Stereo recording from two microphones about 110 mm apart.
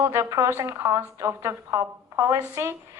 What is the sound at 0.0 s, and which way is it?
Speech, 25° right (ahead or behind).